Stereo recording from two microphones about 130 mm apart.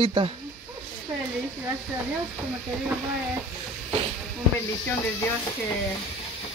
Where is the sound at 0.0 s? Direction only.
40° right (ahead or behind).